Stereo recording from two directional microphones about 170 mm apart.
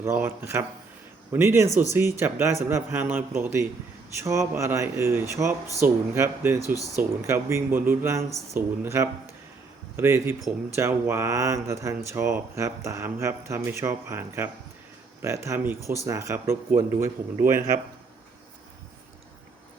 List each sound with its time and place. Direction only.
0.0 s speech: 15° right (ahead or behind)